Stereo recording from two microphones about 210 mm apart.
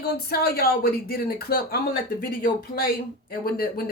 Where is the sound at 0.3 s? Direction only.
45° left (ahead or behind).